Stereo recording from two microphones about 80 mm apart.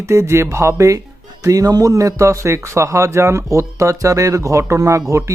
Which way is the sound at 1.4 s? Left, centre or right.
Right.